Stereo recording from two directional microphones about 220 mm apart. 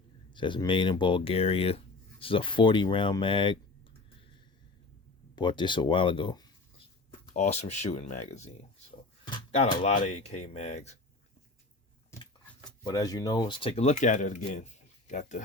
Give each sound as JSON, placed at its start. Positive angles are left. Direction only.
{"t": 0.3, "sound": "speech", "side_deg": 20}
{"t": 5.3, "sound": "speech", "side_deg": 20}
{"t": 7.3, "sound": "speech", "side_deg": 30}
{"t": 12.1, "sound": "a sound", "side_deg": 10}
{"t": 12.8, "sound": "speech", "side_deg": 15}